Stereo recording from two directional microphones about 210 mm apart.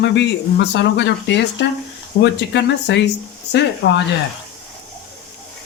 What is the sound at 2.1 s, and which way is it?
Speech, 65° left (ahead or behind).